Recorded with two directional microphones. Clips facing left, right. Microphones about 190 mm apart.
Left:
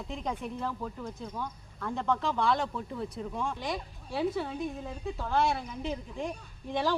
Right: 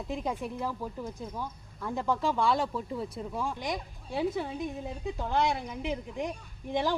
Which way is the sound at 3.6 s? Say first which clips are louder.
Right 1 dB; 20° right (ahead or behind).